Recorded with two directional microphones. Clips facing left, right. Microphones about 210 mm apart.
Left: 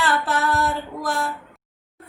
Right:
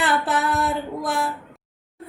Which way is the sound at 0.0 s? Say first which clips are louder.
Even; 20° right (ahead or behind).